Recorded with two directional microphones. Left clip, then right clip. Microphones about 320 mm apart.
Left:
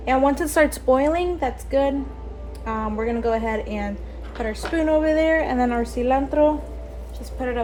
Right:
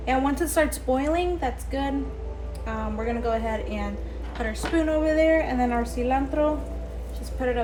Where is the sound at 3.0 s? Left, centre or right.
Left.